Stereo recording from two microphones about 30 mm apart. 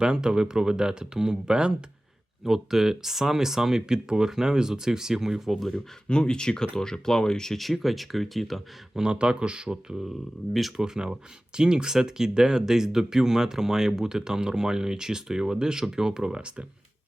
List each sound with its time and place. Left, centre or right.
0.0 s speech: right
2.4 s speech: centre
5.5 s speech: centre
6.1 s speech: left
7.5 s speech: centre
9.1 s speech: right
10.8 s speech: right